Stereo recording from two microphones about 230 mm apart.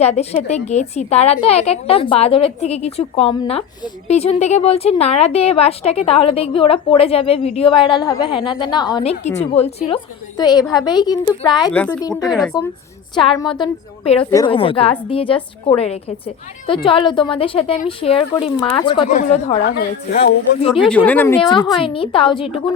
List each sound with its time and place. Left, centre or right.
0.0 s a woman's voice: left
19.6 s speech: left
20.6 s a woman's voice: left
20.8 s a woman's voice: centre
21.3 s a woman's voice: centre